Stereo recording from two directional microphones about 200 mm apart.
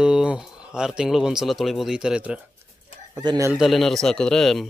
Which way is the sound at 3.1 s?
20° right (ahead or behind).